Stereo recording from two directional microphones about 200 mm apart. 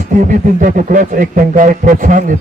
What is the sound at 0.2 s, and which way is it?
A man's voice, 40° right (ahead or behind).